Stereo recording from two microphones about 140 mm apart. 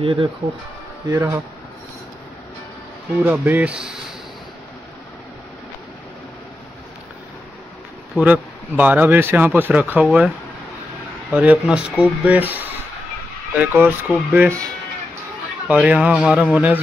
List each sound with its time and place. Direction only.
0.0 s speech: 40° right (ahead or behind)
1.0 s speech: 20° right (ahead or behind)
3.2 s speech: 10° right (ahead or behind)
8.2 s speech: 10° right (ahead or behind)
11.3 s speech: 10° right (ahead or behind)
15.7 s speech: 10° right (ahead or behind)